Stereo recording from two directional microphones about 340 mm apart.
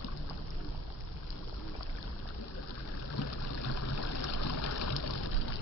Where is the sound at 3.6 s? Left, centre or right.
Left.